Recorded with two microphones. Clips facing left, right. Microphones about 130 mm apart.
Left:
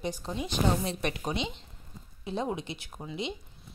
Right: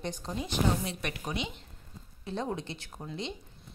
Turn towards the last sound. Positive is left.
turn(degrees=10)  # may be behind; listen again after turning